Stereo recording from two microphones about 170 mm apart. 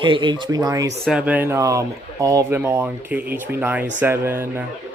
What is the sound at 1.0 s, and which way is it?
Speech, 5° right (ahead or behind).